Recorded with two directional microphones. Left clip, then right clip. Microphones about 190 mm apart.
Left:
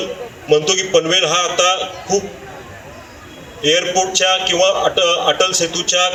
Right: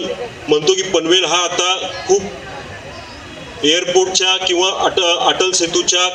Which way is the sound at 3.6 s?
90° left.